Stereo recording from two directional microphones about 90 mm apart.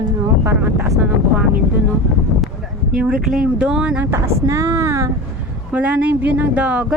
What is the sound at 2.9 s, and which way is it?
Speech, 10° right (ahead or behind).